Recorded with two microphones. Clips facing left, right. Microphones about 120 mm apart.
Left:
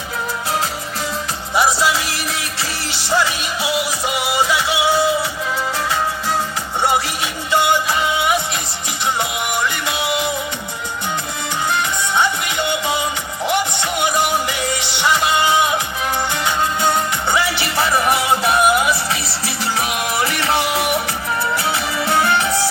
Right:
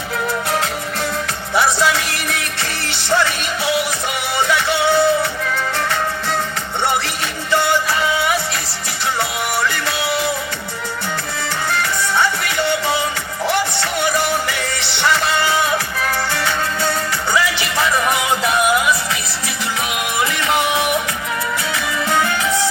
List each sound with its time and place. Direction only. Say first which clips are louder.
1.5 s music: even; 10° left (ahead or behind)
7.5 s music: left 1 dB; 15° left (ahead or behind)
9.6 s music: right 1 dB; 15° left (ahead or behind)
11.7 s music: right 1 dB; 15° left (ahead or behind)
17.4 s music: even; 30° left (ahead or behind)